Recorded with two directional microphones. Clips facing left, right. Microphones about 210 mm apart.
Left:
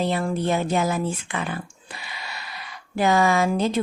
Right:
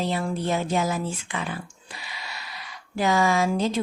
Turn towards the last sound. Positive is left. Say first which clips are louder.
# left 2 dB
turn(degrees=55)  # may be behind; listen again after turning